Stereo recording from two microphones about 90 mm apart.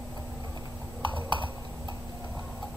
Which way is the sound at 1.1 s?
65° right (ahead or behind).